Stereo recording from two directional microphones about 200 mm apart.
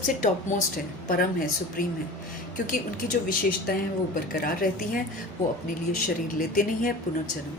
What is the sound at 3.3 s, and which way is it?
Speech, 45° left (ahead or behind).